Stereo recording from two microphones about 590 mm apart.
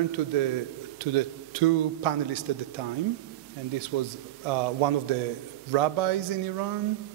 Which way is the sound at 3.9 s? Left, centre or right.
Right.